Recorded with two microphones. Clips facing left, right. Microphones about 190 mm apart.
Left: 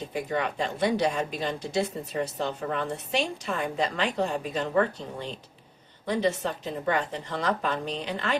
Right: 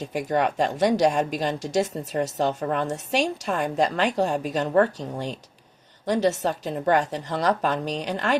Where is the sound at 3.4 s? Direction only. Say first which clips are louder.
Right 5 dB; 40° right (ahead or behind).